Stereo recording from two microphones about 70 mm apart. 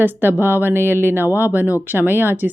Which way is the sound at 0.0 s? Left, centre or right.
Right.